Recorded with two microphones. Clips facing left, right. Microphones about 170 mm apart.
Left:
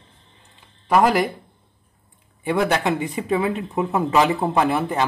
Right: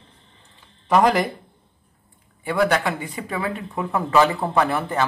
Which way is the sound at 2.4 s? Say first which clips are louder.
Even; 20° left (ahead or behind).